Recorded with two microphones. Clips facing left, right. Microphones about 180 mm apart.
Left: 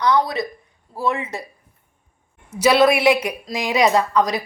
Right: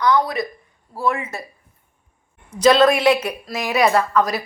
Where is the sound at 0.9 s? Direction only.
20° left (ahead or behind).